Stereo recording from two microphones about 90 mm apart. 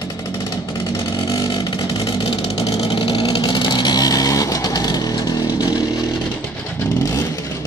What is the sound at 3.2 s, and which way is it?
Vehicle, 50° left (ahead or behind).